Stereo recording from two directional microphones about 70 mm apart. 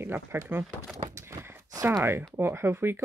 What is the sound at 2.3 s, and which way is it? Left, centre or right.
Speech, right.